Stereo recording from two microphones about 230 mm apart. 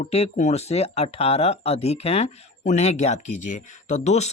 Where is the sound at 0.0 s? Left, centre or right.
Left.